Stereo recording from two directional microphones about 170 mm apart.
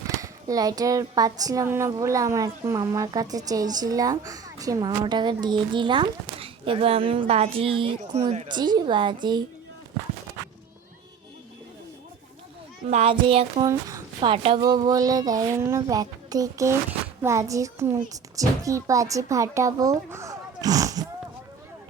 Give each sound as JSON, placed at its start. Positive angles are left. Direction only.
{"t": 0.2, "sound": "speech", "side_deg": -20}
{"t": 12.9, "sound": "speech", "side_deg": -35}
{"t": 14.3, "sound": "speech", "side_deg": -35}